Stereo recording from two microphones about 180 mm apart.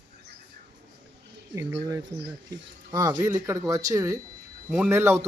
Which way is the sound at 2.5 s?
20° right (ahead or behind).